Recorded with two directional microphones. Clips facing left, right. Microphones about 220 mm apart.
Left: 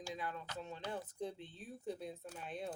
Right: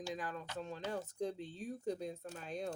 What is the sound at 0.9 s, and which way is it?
Speech, 45° right (ahead or behind).